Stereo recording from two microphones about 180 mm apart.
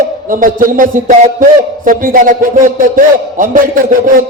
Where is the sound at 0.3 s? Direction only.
50° right (ahead or behind).